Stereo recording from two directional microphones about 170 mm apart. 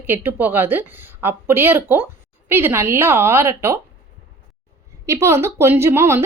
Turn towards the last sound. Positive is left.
turn(degrees=-15)  # may be behind; listen again after turning